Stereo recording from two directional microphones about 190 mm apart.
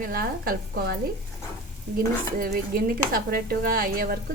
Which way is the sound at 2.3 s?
50° right (ahead or behind).